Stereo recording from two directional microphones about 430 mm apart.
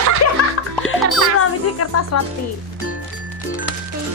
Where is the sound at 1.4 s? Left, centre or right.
Left.